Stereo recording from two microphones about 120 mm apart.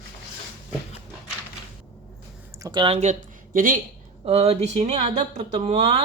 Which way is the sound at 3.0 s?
90° right.